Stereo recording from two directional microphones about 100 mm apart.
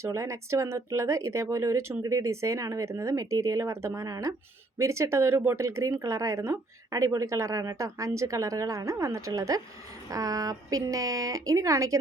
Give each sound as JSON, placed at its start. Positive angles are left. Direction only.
{"t": 0.0, "sound": "speech", "side_deg": -30}